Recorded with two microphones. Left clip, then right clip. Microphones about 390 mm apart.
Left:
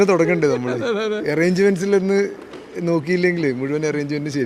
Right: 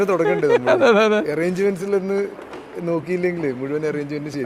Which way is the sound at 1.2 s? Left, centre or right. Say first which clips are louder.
Left 3 dB; left.